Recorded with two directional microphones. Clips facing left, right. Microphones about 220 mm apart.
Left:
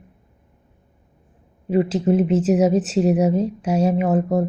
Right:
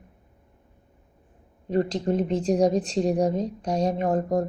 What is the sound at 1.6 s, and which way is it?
Speech, 5° left (ahead or behind).